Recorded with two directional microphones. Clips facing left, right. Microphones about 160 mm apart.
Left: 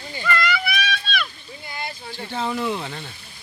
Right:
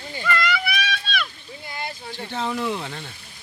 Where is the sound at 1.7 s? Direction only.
40° right (ahead or behind).